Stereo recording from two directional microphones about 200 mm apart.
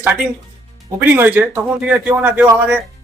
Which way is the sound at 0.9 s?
10° right (ahead or behind).